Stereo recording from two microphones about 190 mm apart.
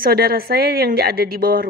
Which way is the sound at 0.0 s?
50° right (ahead or behind).